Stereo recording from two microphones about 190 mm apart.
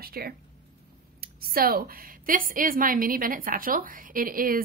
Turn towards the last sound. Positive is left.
turn(degrees=-50)  # may be behind; listen again after turning